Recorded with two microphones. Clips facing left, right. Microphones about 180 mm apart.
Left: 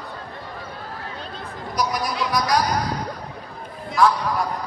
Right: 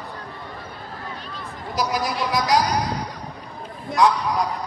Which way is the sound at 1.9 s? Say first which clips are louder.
Even; 25° right (ahead or behind).